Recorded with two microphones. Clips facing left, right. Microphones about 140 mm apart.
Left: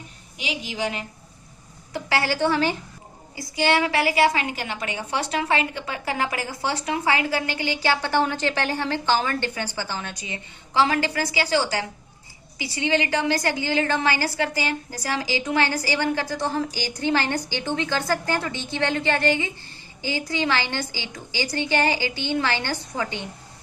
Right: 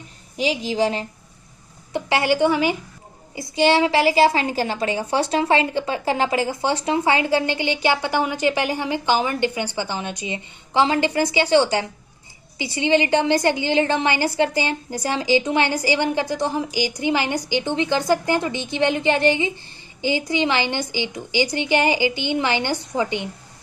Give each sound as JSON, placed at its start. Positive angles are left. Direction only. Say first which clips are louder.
{"t": 0.3, "sound": "a woman's voice", "louder": "right 9 dB", "side_deg": -35}
{"t": 1.9, "sound": "a woman's voice", "louder": "right 5 dB", "side_deg": -20}
{"t": 3.3, "sound": "a woman's voice", "louder": "right 4 dB", "side_deg": -25}